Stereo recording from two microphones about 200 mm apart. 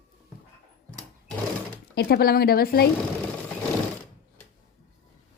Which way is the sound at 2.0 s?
50° left (ahead or behind).